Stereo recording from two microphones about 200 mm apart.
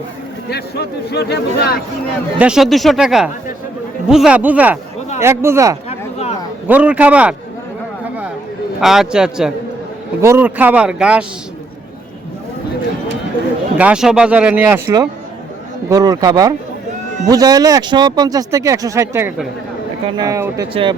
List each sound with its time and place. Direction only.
0.5 s a man's voice: 55° left (ahead or behind)
2.4 s speech: 5° right (ahead or behind)
5.9 s a sound: 30° left (ahead or behind)
6.7 s speech: 5° right (ahead or behind)
8.8 s speech: centre (ahead or behind)
10.2 s speech: 15° right (ahead or behind)
13.7 s speech: 5° right (ahead or behind)